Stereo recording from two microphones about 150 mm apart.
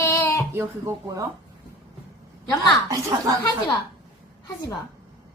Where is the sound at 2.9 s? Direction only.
20° right (ahead or behind).